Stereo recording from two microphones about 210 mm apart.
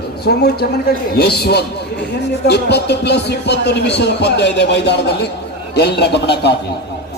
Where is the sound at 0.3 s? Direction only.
50° left (ahead or behind).